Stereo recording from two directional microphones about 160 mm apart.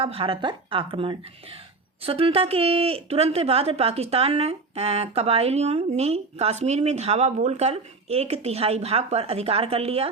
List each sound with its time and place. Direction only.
0.0 s speech: 35° right (ahead or behind)